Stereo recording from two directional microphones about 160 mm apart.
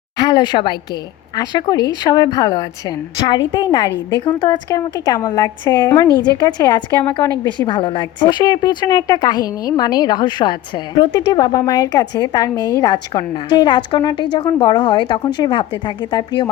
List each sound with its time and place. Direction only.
0.2 s a woman's voice: 30° left (ahead or behind)